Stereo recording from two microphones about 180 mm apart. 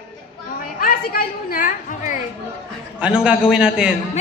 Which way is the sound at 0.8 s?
55° left (ahead or behind).